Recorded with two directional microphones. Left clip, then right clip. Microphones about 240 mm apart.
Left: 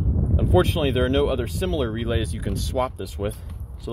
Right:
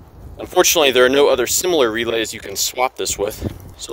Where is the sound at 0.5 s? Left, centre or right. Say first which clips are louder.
Right 9 dB; right.